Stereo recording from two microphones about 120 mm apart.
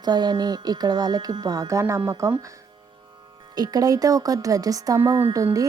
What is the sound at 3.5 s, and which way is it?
Speech, 35° right (ahead or behind).